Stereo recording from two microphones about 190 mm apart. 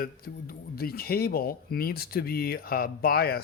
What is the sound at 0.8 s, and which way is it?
Speech, 55° left (ahead or behind).